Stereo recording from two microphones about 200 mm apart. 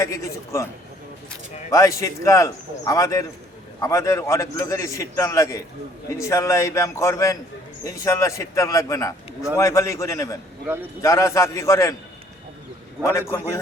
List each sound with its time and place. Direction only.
0.0 s a man's voice: 15° left (ahead or behind)
1.7 s a man's voice: 15° left (ahead or behind)
13.1 s a man's voice: 10° left (ahead or behind)